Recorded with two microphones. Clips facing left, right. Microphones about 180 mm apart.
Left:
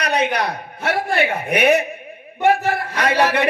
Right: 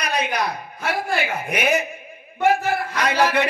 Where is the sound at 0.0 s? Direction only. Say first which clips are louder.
Left 4 dB; 65° left (ahead or behind).